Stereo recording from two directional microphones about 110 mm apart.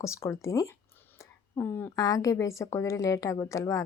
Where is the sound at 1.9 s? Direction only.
30° left (ahead or behind).